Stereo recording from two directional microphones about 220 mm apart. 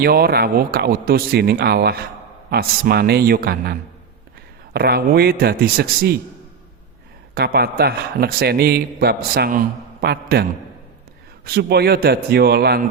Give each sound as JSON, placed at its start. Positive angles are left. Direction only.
{"t": 0.0, "sound": "a man's voice", "side_deg": -45}
{"t": 7.3, "sound": "a man's voice", "side_deg": -45}
{"t": 11.4, "sound": "a man's voice", "side_deg": -45}